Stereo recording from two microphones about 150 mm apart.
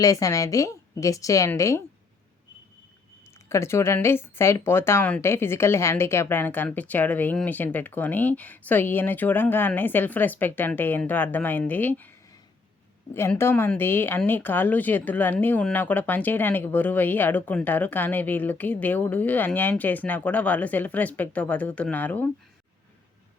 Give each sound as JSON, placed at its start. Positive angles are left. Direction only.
{"t": 0.0, "sound": "a woman's voice", "side_deg": 25}
{"t": 3.2, "sound": "speech", "side_deg": 20}
{"t": 13.1, "sound": "speech", "side_deg": 15}